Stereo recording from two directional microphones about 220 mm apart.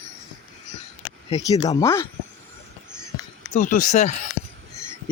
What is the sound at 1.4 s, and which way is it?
Speech, 15° left (ahead or behind).